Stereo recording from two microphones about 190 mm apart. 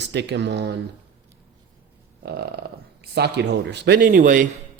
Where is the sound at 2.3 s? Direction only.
55° right (ahead or behind).